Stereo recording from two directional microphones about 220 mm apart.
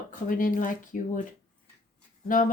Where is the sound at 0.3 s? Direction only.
40° left (ahead or behind).